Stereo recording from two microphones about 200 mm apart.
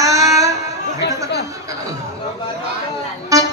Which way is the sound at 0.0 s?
15° right (ahead or behind).